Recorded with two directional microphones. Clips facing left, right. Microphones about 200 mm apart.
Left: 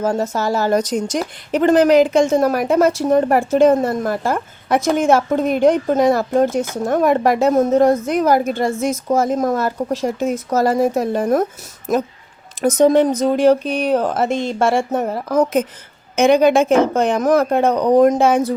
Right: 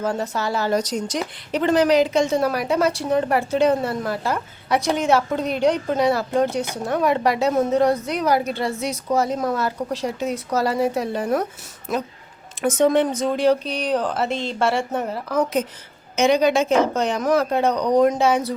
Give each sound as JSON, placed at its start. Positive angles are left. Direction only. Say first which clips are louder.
{"t": 0.0, "sound": "a woman's voice", "louder": "left 5 dB", "side_deg": 45}